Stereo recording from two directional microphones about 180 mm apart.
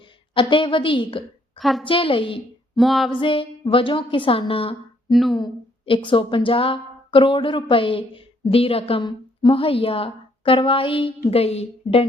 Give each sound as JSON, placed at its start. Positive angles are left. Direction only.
{"t": 0.3, "sound": "a woman's voice", "side_deg": 30}
{"t": 1.5, "sound": "a woman's voice", "side_deg": 0}
{"t": 1.8, "sound": "a woman's voice", "side_deg": 30}
{"t": 2.7, "sound": "female singing", "side_deg": 0}
{"t": 3.1, "sound": "a woman's voice", "side_deg": 30}
{"t": 5.1, "sound": "female singing", "side_deg": 0}
{"t": 5.4, "sound": "a woman's voice", "side_deg": 30}